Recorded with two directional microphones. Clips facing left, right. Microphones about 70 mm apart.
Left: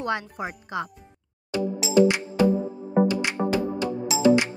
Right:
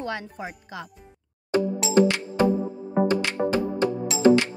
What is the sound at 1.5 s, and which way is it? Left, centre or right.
Music, right.